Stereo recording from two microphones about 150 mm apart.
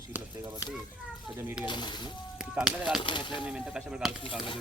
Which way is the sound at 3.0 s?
30° left (ahead or behind).